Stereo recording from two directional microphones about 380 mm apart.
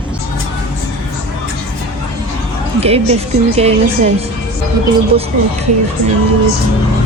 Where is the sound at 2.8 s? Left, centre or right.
Centre.